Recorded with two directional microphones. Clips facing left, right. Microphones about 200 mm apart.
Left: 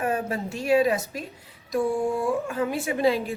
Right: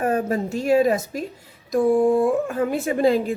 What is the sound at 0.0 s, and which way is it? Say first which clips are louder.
A woman's voice: right 5 dB; 40° right (ahead or behind).